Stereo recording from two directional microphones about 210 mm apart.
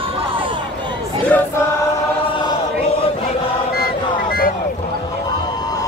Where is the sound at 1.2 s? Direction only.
10° left (ahead or behind).